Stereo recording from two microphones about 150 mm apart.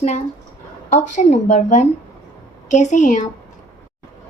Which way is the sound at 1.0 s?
55° left (ahead or behind).